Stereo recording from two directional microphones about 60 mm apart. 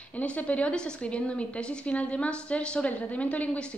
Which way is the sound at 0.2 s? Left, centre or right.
Left.